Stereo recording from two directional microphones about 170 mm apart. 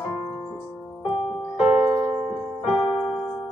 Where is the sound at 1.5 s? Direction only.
10° right (ahead or behind).